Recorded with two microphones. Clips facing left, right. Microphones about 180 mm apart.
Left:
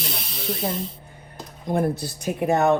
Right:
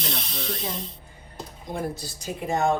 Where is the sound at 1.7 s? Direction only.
55° left (ahead or behind).